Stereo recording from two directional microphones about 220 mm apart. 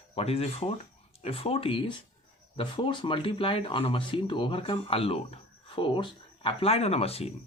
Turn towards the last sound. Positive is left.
turn(degrees=25)  # may be behind; listen again after turning